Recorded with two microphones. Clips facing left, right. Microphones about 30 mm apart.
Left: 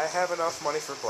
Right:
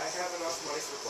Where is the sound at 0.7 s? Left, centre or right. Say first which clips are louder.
Left 5 dB; left.